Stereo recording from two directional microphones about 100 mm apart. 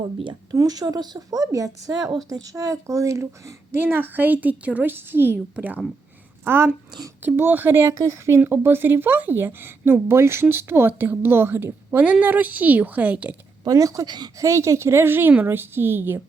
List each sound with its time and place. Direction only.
0.5 s speech: 35° right (ahead or behind); by 13.3 s 15° right (ahead or behind)
13.7 s speech: 35° right (ahead or behind)
14.4 s speech: 30° right (ahead or behind)